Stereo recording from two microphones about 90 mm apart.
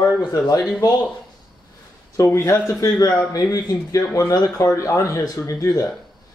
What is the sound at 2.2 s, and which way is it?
Speech, 30° left (ahead or behind).